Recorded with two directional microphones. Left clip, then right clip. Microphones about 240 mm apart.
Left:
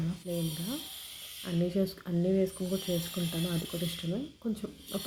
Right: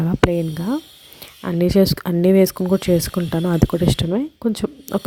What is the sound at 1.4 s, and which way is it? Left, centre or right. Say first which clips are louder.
Speech: right 16 dB; right.